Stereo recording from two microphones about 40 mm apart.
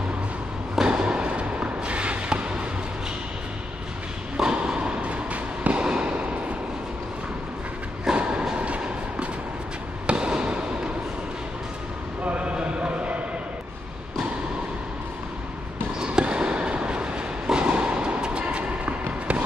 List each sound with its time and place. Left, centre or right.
0.8 s a sound: right
4.4 s fireworks: right
8.2 s train: right
10.0 s basketball bounce: right
12.3 s clip-clop: right
16.0 s train: right